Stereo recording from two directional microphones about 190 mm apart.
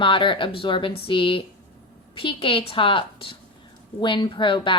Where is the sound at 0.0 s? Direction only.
25° left (ahead or behind).